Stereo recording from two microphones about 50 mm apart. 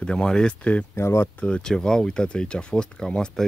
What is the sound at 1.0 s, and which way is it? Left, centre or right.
Speech, left.